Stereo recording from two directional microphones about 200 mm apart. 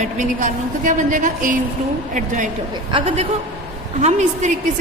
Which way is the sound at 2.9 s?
30° right (ahead or behind).